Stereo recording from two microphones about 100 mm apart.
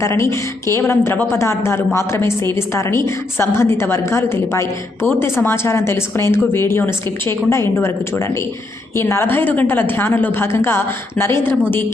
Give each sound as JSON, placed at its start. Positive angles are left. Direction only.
{"t": 0.0, "sound": "a woman's voice", "side_deg": 30}
{"t": 9.0, "sound": "a woman's voice", "side_deg": 25}